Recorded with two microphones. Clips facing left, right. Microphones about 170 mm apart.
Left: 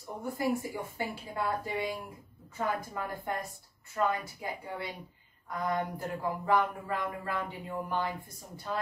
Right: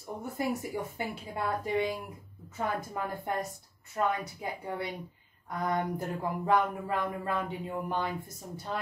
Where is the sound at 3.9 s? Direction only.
25° right (ahead or behind).